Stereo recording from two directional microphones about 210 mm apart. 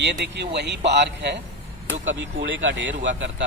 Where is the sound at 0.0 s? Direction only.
55° right (ahead or behind).